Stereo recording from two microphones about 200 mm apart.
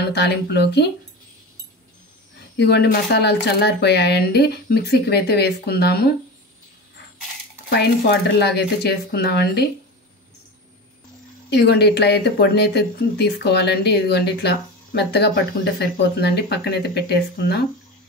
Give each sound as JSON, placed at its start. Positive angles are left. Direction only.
{"t": 0.1, "sound": "speech", "side_deg": 55}
{"t": 2.5, "sound": "speech", "side_deg": 55}
{"t": 8.4, "sound": "speech", "side_deg": 55}
{"t": 11.5, "sound": "speech", "side_deg": 55}